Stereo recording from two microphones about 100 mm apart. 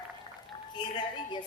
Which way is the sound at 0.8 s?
50° left (ahead or behind).